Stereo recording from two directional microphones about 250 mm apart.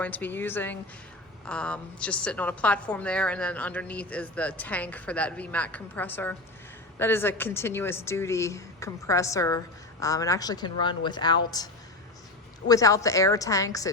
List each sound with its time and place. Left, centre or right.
0.0 s a woman's voice: centre